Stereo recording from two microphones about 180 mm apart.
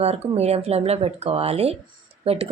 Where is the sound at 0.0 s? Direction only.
35° right (ahead or behind).